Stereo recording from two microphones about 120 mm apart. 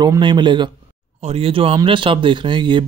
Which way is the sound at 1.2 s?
55° right (ahead or behind).